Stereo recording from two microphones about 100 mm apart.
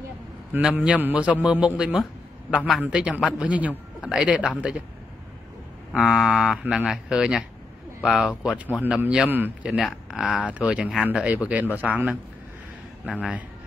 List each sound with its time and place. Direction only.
0.5 s a man's voice: 15° right (ahead or behind)
5.9 s a man's voice: centre (ahead or behind)
9.3 s a man's voice: 20° right (ahead or behind)
9.7 s a man's voice: 5° right (ahead or behind)